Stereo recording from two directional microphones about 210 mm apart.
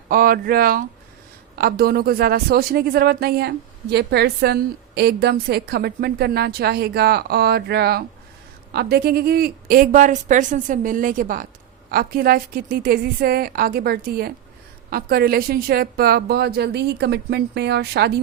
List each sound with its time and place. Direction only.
0.1 s a woman's voice: 45° right (ahead or behind)